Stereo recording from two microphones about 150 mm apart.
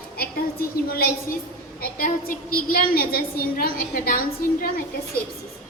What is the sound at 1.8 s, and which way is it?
A woman's voice, 70° left (ahead or behind).